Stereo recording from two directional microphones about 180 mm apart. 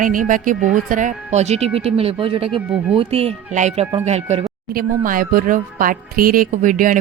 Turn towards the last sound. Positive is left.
turn(degrees=-50)  # may be behind; listen again after turning